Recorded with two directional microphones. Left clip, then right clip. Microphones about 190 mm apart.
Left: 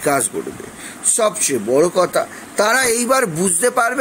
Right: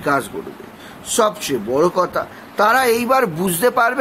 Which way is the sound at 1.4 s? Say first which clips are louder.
Left 2 dB; centre (ahead or behind).